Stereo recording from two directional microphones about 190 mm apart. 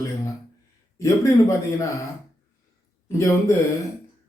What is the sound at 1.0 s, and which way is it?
Speech, 15° left (ahead or behind).